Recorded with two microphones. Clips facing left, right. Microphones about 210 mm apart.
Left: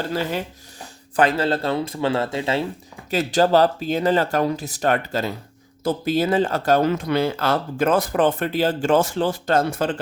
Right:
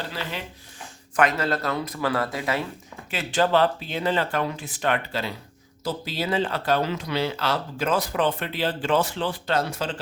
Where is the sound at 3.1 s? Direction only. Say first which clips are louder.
Left 5 dB; 40° left (ahead or behind).